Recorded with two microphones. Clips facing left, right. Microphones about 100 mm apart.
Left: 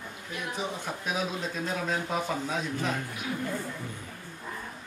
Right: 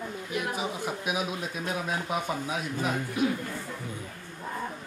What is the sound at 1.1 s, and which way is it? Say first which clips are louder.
Speech: left 2 dB; 10° right (ahead or behind).